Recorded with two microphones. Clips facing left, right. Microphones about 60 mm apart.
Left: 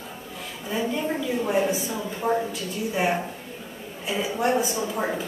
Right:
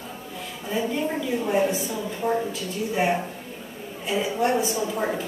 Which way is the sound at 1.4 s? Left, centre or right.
Centre.